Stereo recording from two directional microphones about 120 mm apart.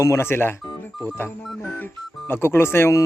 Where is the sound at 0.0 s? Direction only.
25° left (ahead or behind).